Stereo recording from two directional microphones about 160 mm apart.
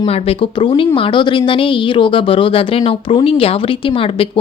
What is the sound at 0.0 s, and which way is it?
Speech, 35° left (ahead or behind).